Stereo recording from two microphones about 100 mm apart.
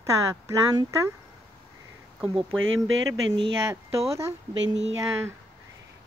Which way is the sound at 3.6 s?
30° right (ahead or behind).